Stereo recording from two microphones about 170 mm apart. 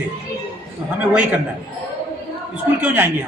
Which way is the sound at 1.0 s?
10° right (ahead or behind).